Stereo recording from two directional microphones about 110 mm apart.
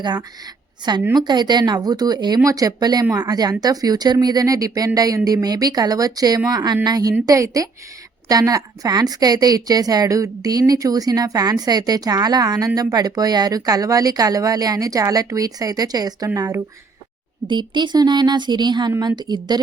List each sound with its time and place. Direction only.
0.0 s a woman's voice: 40° right (ahead or behind)
17.5 s speech: 45° right (ahead or behind)